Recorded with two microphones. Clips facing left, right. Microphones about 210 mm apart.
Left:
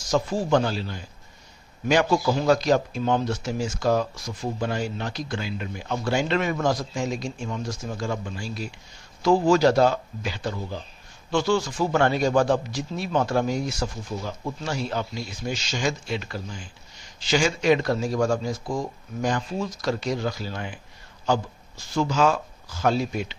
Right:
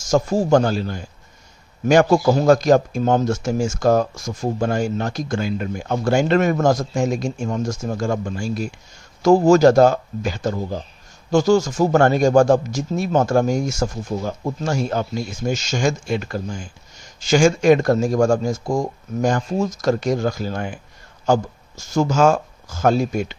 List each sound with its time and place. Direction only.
0.0 s speech: 45° right (ahead or behind)